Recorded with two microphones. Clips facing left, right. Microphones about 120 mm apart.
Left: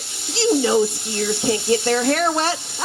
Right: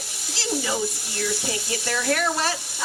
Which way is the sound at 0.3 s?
25° left (ahead or behind).